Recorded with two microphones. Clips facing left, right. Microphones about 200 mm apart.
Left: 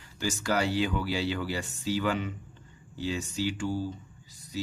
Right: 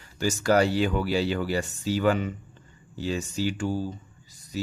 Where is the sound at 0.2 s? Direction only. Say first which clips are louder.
Right 7 dB; 45° right (ahead or behind).